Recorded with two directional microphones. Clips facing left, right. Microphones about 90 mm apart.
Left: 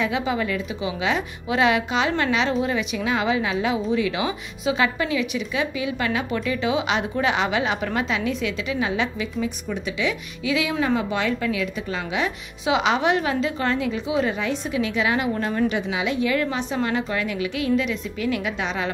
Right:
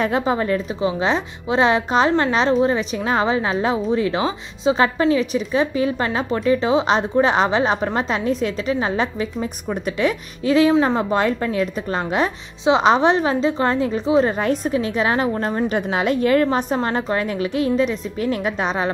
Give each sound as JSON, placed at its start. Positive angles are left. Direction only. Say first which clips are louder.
{"t": 0.0, "sound": "speech", "louder": "right 4 dB", "side_deg": -40}
{"t": 15.7, "sound": "speech", "louder": "right 5 dB", "side_deg": -45}